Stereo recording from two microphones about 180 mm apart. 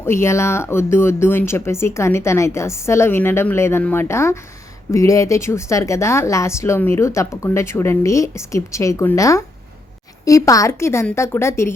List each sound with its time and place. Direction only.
0.0 s speech: 15° left (ahead or behind)